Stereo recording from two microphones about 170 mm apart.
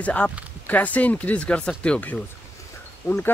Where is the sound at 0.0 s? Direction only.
10° left (ahead or behind).